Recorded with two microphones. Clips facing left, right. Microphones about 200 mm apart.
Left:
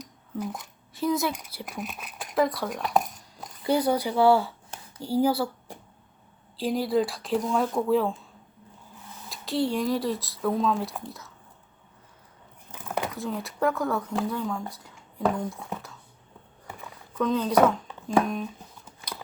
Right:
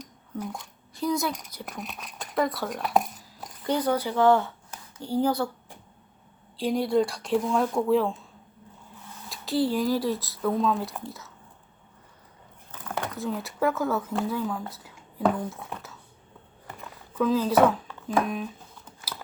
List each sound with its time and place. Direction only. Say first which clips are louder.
0.3 s speech: left 1 dB; centre (ahead or behind)
3.6 s speech: left 2 dB; 10° left (ahead or behind)
6.6 s speech: right 1 dB; centre (ahead or behind)
9.3 s speech: right 1 dB; centre (ahead or behind)
13.1 s speech: right 1 dB; centre (ahead or behind)
16.6 s a sound: even; centre (ahead or behind)
19.1 s biting: left 1 dB; 5° right (ahead or behind)